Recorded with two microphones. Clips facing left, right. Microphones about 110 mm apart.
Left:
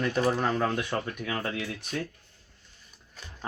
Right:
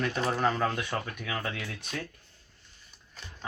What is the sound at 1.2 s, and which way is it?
Speech, 35° left (ahead or behind).